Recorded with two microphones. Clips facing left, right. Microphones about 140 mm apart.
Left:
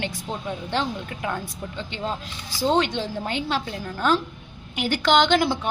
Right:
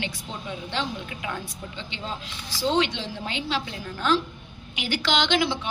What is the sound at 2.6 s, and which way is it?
A woman's voice, 50° left (ahead or behind).